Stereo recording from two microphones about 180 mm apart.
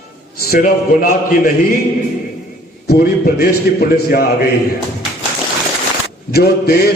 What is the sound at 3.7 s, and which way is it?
Speech, 60° left (ahead or behind).